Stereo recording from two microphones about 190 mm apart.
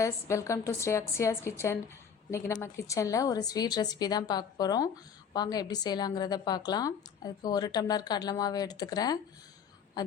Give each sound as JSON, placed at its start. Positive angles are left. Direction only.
{"t": 0.0, "sound": "a woman's voice", "side_deg": 15}